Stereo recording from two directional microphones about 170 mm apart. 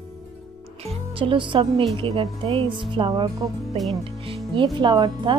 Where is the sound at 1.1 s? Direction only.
30° right (ahead or behind).